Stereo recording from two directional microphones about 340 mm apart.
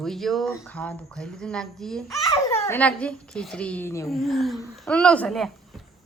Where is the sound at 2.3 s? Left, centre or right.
Centre.